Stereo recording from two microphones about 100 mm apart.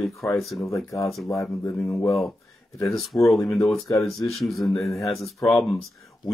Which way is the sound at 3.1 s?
15° left (ahead or behind).